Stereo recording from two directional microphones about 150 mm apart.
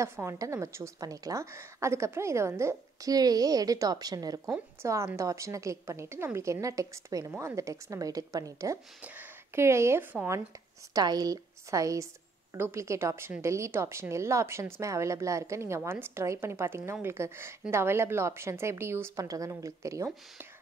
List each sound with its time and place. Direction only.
0.0 s a woman's voice: 20° right (ahead or behind)
10.9 s a woman's voice: 25° right (ahead or behind)